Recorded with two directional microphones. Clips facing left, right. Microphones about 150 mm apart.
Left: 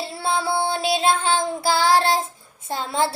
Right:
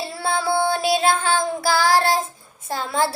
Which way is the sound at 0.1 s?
25° left (ahead or behind).